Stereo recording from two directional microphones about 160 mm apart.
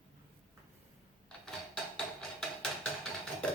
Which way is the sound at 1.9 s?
Centre (ahead or behind).